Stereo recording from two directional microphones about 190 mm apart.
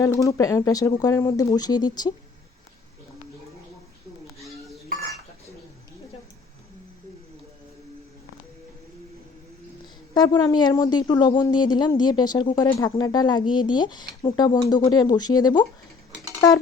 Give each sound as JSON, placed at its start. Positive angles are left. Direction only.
{"t": 0.0, "sound": "speech", "side_deg": 15}
{"t": 4.3, "sound": "rodents", "side_deg": 0}
{"t": 10.2, "sound": "speech", "side_deg": 20}